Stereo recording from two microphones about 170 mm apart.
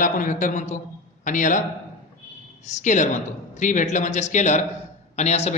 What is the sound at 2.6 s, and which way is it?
A man's voice, 45° left (ahead or behind).